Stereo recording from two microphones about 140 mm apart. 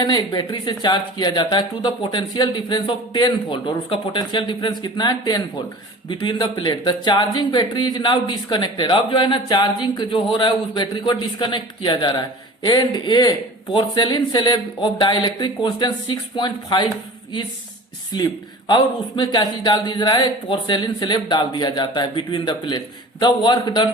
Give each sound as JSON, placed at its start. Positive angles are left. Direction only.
{"t": 0.0, "sound": "speech", "side_deg": 30}
{"t": 18.1, "sound": "speech", "side_deg": 30}